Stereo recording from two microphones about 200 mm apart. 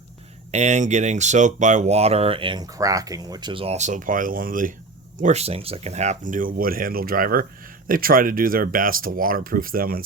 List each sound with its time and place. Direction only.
0.5 s speech: 35° right (ahead or behind)